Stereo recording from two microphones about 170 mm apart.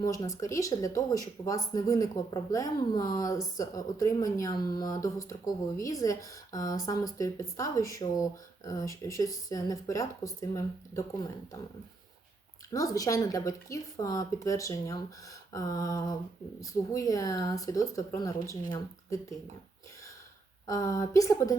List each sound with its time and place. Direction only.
0.0 s speech: 20° left (ahead or behind)
12.7 s speech: 20° left (ahead or behind)
20.7 s speech: 20° left (ahead or behind)